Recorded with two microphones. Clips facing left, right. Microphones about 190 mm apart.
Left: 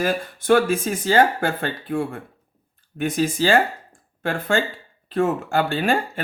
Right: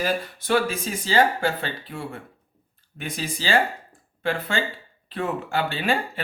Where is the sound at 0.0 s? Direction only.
50° left (ahead or behind).